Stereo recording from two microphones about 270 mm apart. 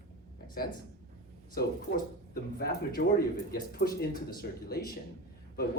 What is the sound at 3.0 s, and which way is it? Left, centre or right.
Speech, left.